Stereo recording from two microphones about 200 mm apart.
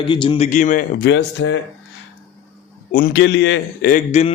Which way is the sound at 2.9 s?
55° left (ahead or behind).